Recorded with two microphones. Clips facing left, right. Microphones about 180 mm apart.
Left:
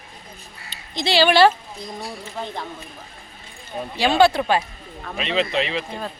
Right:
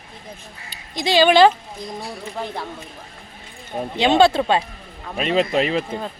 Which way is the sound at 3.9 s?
20° right (ahead or behind).